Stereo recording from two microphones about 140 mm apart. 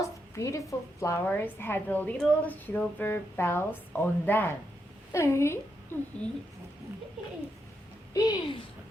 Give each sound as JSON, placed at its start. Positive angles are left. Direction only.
{"t": 0.0, "sound": "a woman's voice", "side_deg": 20}
{"t": 8.1, "sound": "speech", "side_deg": 30}